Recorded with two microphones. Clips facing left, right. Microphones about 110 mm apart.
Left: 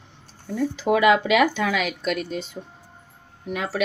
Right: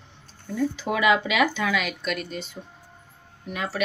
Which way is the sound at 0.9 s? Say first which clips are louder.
Left 6 dB; 60° left (ahead or behind).